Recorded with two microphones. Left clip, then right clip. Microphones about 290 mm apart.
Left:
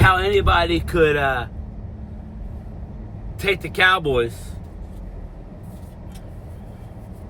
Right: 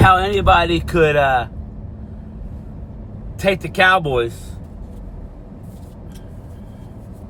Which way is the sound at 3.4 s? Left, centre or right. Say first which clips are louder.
Right 3 dB; centre.